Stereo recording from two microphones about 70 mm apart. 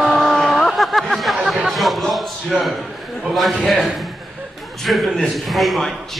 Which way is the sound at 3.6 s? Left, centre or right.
Centre.